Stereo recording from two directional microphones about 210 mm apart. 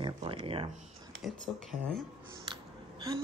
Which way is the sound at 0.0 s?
25° right (ahead or behind).